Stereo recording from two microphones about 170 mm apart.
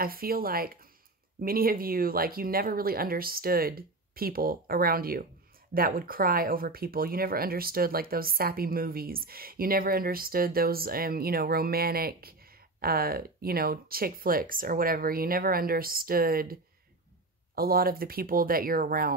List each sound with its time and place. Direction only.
0.0 s speech: 60° right (ahead or behind)
17.6 s speech: 60° right (ahead or behind)